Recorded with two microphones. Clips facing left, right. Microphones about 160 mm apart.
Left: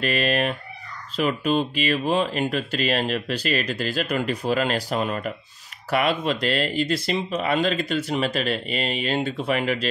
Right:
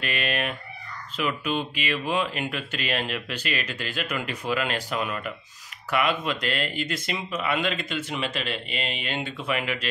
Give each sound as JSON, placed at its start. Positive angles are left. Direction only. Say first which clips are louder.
{"t": 0.0, "sound": "speech", "louder": "left 6 dB", "side_deg": 40}